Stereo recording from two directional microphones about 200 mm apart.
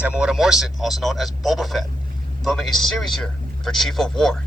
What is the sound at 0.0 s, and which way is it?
A man's voice, 5° right (ahead or behind).